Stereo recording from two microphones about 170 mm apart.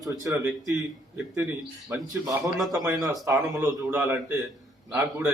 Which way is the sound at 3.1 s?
20° right (ahead or behind).